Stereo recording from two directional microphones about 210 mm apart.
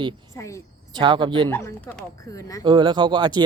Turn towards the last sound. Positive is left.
turn(degrees=-20)  # may be behind; listen again after turning